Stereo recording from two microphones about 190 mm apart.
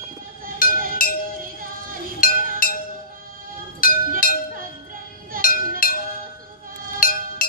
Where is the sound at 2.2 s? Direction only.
50° left (ahead or behind).